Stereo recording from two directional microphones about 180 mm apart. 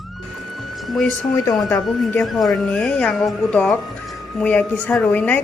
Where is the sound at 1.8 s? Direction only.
5° left (ahead or behind).